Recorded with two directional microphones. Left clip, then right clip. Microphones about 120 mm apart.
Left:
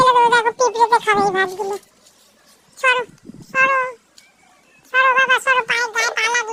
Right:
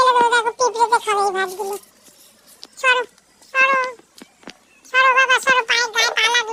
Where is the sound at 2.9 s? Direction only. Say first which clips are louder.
Right 2 dB; 20° left (ahead or behind).